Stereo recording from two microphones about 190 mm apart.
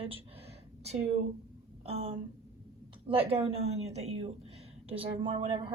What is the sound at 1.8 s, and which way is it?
A woman's voice, 30° right (ahead or behind).